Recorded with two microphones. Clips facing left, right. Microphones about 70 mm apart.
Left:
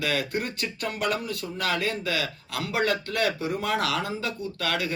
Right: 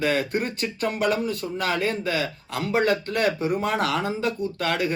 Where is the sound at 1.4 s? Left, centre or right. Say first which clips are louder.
Even; right.